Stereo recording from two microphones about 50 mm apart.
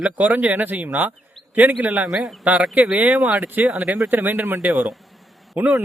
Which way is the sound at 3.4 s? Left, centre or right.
Right.